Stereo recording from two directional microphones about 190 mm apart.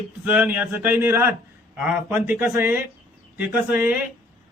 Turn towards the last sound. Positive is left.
turn(degrees=-10)  # may be behind; listen again after turning